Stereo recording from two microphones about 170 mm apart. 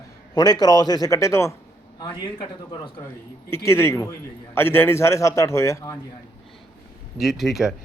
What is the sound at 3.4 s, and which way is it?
A man's voice, 15° left (ahead or behind).